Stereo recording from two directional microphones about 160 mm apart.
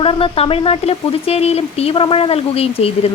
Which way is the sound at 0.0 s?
35° left (ahead or behind).